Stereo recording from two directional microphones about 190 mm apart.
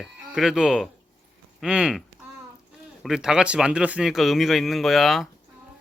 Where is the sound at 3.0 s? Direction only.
5° right (ahead or behind).